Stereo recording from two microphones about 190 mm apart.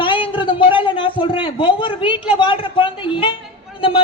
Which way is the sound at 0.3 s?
25° left (ahead or behind).